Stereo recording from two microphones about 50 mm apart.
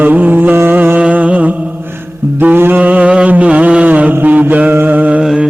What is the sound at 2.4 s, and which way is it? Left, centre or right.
Music, right.